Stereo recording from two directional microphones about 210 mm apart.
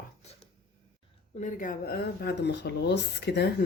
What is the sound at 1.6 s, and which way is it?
Speech, 50° left (ahead or behind).